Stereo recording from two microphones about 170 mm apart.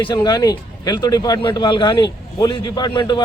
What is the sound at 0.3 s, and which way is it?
Speech, 25° left (ahead or behind).